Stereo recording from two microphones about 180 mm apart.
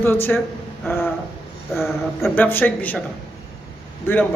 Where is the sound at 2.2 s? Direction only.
10° left (ahead or behind).